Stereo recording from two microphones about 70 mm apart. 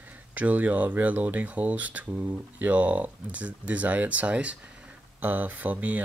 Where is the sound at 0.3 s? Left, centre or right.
Right.